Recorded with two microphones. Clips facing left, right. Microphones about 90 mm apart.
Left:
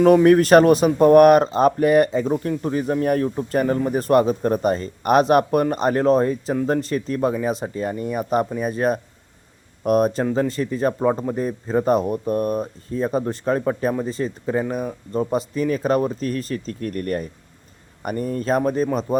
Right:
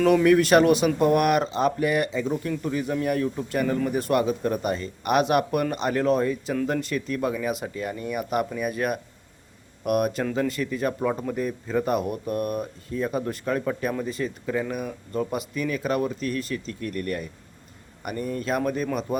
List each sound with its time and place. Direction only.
0.0 s speech: 35° left (ahead or behind)